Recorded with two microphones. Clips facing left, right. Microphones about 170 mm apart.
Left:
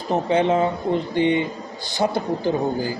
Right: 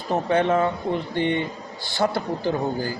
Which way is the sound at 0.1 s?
20° left (ahead or behind).